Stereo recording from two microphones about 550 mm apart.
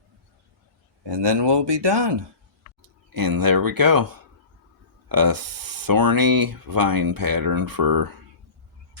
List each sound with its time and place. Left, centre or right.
1.0 s speech: right
3.1 s speech: right